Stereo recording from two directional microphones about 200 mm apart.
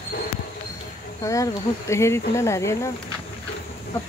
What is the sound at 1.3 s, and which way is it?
Speech, 15° left (ahead or behind).